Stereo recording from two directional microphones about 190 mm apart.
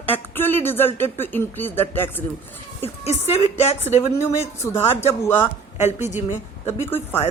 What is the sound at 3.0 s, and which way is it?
Speech, 35° left (ahead or behind).